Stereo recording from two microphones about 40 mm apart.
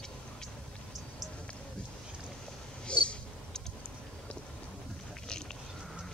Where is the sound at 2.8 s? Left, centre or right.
Left.